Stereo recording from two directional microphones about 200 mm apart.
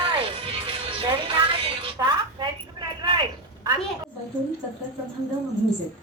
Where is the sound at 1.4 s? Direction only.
25° right (ahead or behind).